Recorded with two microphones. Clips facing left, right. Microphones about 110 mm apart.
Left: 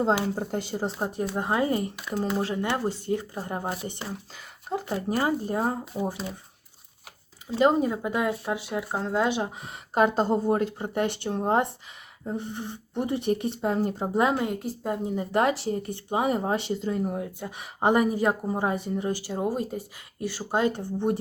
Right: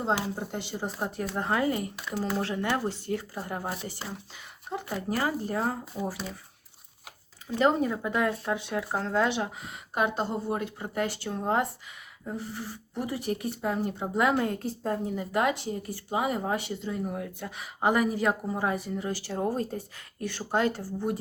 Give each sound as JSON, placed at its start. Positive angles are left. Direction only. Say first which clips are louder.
{"t": 0.0, "sound": "speech", "louder": "left 4 dB", "side_deg": 45}
{"t": 0.9, "sound": "speech", "louder": "left 3 dB", "side_deg": 25}
{"t": 2.3, "sound": "speech", "louder": "even", "side_deg": 15}
{"t": 4.7, "sound": "speech", "louder": "left 5 dB", "side_deg": 40}
{"t": 5.1, "sound": "speech", "louder": "left 3 dB", "side_deg": 20}
{"t": 7.6, "sound": "speech", "louder": "left 3 dB", "side_deg": 20}
{"t": 9.9, "sound": "speech", "louder": "left 6 dB", "side_deg": 35}
{"t": 14.1, "sound": "speech", "louder": "even", "side_deg": 25}
{"t": 14.4, "sound": "speech", "louder": "left 1 dB", "side_deg": 10}
{"t": 15.0, "sound": "speech", "louder": "left 4 dB", "side_deg": 25}
{"t": 17.0, "sound": "speech", "louder": "left 4 dB", "side_deg": 25}
{"t": 19.2, "sound": "speech", "louder": "left 1 dB", "side_deg": 15}